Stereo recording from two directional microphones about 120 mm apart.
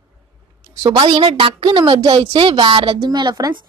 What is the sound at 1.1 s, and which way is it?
A child's voice, 50° right (ahead or behind).